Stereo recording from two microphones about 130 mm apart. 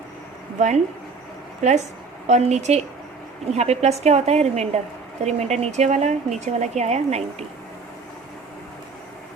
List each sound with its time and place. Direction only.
1.6 s a woman's voice: 60° right (ahead or behind)